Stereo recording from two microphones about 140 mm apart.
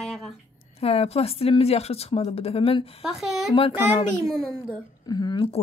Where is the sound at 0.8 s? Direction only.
45° left (ahead or behind).